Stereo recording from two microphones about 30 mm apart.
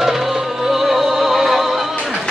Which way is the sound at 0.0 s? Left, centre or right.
Centre.